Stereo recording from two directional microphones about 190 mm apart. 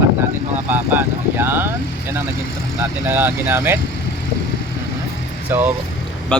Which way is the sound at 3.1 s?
10° right (ahead or behind).